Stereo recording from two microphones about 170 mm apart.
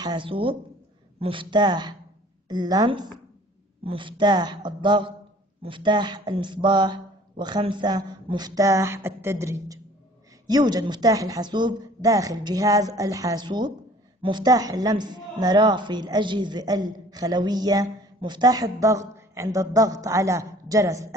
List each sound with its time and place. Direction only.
0.0 s a woman's voice: 30° right (ahead or behind)